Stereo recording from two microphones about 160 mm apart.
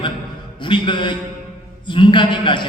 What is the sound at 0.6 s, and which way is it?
A man's voice, 30° left (ahead or behind).